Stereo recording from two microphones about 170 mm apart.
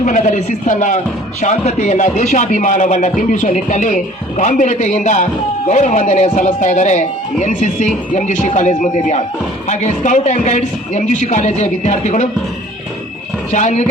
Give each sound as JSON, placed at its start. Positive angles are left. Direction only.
{"t": 0.0, "sound": "speech", "side_deg": 45}
{"t": 13.5, "sound": "speech", "side_deg": 45}